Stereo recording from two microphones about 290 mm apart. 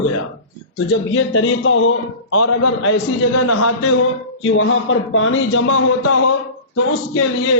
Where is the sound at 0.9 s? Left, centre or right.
Left.